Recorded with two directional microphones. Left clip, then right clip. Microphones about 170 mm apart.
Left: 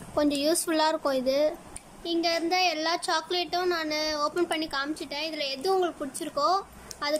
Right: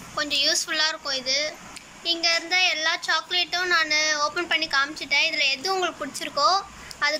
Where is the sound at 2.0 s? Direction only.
25° left (ahead or behind).